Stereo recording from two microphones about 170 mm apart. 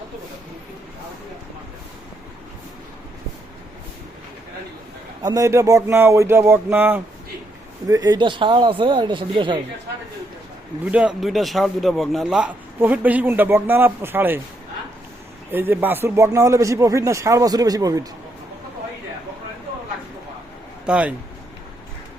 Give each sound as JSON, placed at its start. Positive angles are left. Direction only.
{"t": 5.2, "sound": "a man's voice", "side_deg": -20}
{"t": 10.8, "sound": "a man's voice", "side_deg": -5}
{"t": 15.5, "sound": "a man's voice", "side_deg": -10}
{"t": 20.8, "sound": "speech", "side_deg": -5}